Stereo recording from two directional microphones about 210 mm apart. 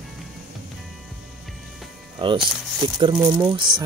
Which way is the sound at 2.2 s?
25° right (ahead or behind).